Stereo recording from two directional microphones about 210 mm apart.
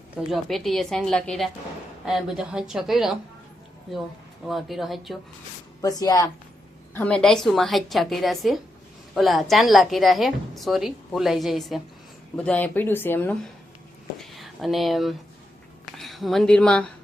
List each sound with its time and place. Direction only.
0.2 s a woman's voice: centre (ahead or behind)
4.4 s a woman's voice: centre (ahead or behind)
5.8 s speech: 20° left (ahead or behind)
6.9 s a woman's voice: 5° left (ahead or behind)
14.2 s a sound: centre (ahead or behind)
16.0 s a woman's voice: centre (ahead or behind)